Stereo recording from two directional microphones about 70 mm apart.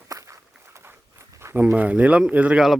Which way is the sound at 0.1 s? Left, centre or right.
Right.